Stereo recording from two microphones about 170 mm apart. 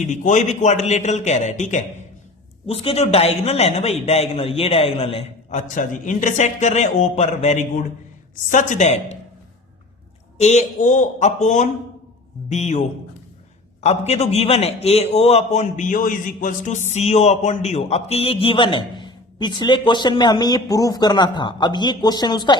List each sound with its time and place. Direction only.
0.1 s a man's voice: 45° left (ahead or behind)
10.3 s a man's voice: 40° left (ahead or behind)
13.8 s a man's voice: 40° left (ahead or behind)